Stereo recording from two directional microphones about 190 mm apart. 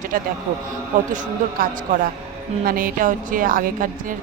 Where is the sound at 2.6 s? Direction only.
50° right (ahead or behind).